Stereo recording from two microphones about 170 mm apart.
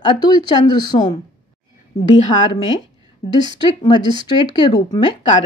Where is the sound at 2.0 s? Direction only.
30° left (ahead or behind).